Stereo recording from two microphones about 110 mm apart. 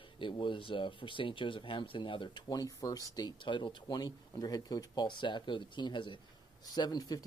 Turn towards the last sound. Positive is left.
turn(degrees=35)  # may be behind; listen again after turning